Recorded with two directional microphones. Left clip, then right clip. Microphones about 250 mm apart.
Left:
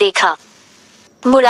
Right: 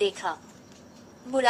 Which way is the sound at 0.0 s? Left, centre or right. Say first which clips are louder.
Left 15 dB; left.